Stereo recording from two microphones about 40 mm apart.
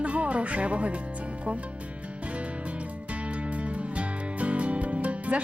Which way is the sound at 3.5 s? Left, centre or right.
Right.